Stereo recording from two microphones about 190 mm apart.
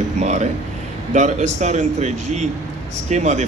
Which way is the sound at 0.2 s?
40° right (ahead or behind).